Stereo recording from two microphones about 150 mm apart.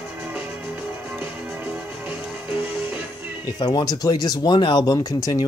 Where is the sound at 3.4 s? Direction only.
30° left (ahead or behind).